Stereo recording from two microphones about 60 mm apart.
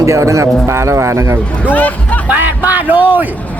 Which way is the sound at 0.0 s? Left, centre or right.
Right.